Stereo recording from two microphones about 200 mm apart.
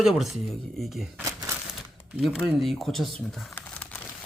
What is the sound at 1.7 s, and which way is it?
Speech, 5° right (ahead or behind).